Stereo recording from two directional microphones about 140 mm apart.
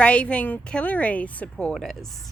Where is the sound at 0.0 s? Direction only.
10° left (ahead or behind).